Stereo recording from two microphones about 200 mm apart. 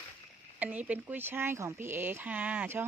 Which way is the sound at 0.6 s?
5° right (ahead or behind).